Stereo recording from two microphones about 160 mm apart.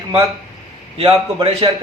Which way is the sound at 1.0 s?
35° right (ahead or behind).